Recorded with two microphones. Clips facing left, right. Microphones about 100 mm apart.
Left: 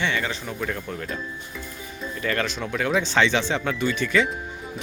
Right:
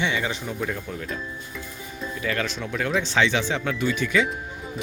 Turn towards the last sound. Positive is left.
turn(degrees=-10)  # may be behind; listen again after turning